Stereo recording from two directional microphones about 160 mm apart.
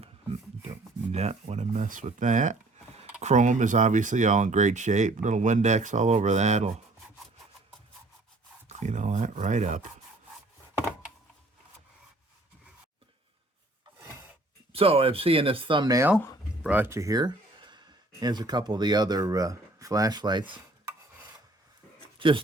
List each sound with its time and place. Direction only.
1.1 s speech: 45° right (ahead or behind)
8.8 s speech: 50° right (ahead or behind)
14.7 s speech: 35° right (ahead or behind)
16.6 s speech: 10° right (ahead or behind); by 20.6 s 30° right (ahead or behind)
22.2 s speech: 30° right (ahead or behind)